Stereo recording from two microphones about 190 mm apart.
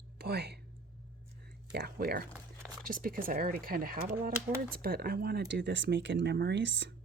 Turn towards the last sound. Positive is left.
turn(degrees=-70)  # may be behind; listen again after turning